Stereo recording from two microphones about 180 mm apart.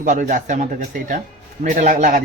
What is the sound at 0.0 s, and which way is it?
Speech, 45° right (ahead or behind).